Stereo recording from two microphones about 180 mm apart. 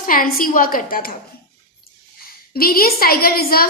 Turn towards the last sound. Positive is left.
turn(degrees=55)  # may be behind; listen again after turning